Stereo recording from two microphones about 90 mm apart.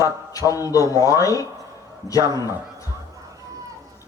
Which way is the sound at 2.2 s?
40° right (ahead or behind).